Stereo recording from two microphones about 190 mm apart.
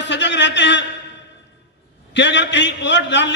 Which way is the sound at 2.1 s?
70° left (ahead or behind).